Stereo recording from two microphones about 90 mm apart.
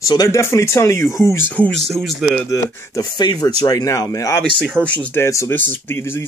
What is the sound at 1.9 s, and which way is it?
Speech, centre (ahead or behind).